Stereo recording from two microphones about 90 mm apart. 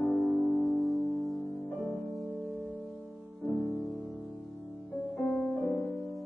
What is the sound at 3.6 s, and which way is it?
Music, centre (ahead or behind).